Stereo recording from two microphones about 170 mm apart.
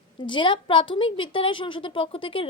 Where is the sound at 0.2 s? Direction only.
30° left (ahead or behind).